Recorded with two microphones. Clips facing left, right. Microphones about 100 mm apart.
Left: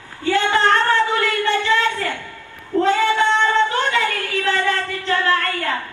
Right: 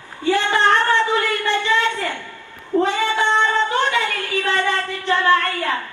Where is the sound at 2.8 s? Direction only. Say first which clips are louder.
Left 3 dB; 30° right (ahead or behind).